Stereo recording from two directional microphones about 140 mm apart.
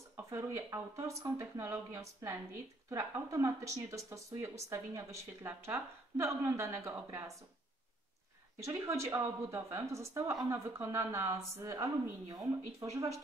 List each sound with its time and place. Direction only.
0.1 s speech: 20° right (ahead or behind)
8.6 s speech: 20° right (ahead or behind)